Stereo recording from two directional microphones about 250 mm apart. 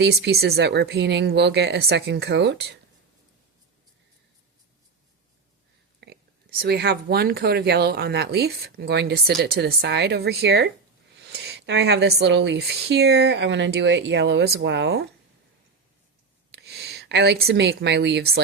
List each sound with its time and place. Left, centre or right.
0.0 s speech: right
6.0 s whispering: right
6.6 s speech: right
16.5 s speech: right